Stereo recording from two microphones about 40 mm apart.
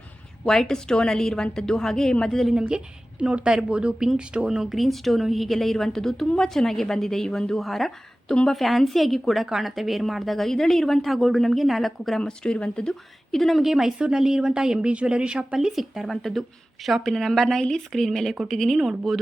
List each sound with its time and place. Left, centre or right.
0.4 s a woman's voice: centre
2.6 s a woman's voice: right
4.4 s a woman's voice: centre
4.8 s a woman's voice: centre
7.6 s speech: centre
12.2 s speech: left
13.3 s speech: centre
13.6 s a woman's voice: centre; by 15.5 s right
15.5 s a woman's voice: centre
16.0 s a woman's voice: centre
17.6 s a woman's voice: centre
17.9 s a woman's voice: centre